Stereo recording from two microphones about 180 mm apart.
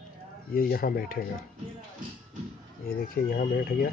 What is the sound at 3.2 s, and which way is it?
Speech, 60° left (ahead or behind).